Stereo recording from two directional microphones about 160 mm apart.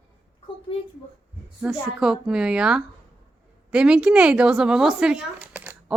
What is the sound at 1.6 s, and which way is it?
A woman's voice, 5° right (ahead or behind).